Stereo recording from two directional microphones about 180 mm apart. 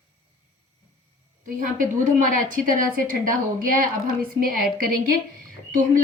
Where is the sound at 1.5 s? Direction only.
50° right (ahead or behind).